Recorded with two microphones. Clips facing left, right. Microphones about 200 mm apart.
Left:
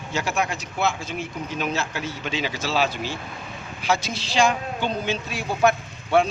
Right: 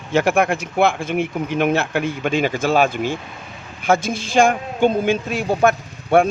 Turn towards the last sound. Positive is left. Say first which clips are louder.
# right 5 dB
turn(degrees=-50)  # may be behind; listen again after turning